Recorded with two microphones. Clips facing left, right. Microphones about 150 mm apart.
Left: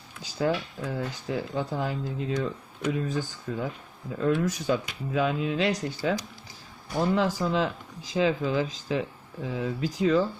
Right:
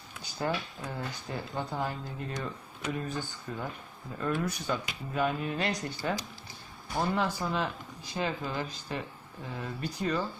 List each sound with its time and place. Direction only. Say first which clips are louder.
0.2 s speech: left 6 dB; 75° left (ahead or behind)
7.2 s speech: left 5 dB; 90° left